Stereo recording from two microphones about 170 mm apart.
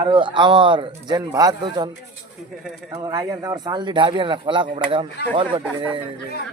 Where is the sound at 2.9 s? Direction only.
25° right (ahead or behind).